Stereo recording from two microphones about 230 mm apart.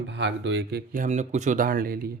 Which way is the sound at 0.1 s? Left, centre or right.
Right.